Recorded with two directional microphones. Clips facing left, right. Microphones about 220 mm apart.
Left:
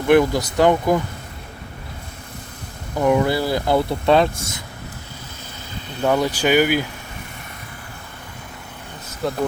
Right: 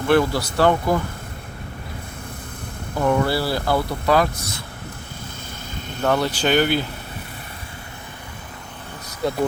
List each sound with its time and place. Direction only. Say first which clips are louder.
0.1 s speech: left 3 dB; 15° left (ahead or behind)
3.0 s speech: left 2 dB; 15° left (ahead or behind)
6.0 s speech: left 2 dB; 10° left (ahead or behind)